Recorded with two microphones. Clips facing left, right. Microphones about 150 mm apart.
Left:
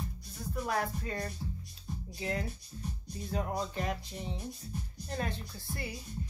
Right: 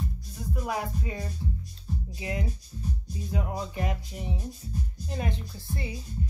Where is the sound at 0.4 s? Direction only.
10° right (ahead or behind).